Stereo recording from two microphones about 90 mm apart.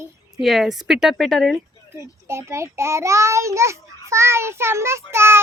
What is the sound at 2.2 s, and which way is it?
A child's voice, 30° right (ahead or behind).